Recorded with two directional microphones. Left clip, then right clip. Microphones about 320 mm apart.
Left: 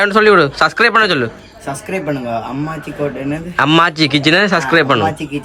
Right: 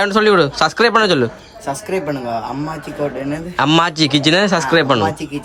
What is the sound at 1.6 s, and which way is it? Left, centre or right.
A man's voice, centre.